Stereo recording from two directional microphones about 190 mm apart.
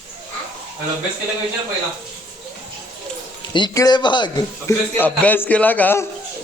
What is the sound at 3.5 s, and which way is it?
Speech, 20° left (ahead or behind).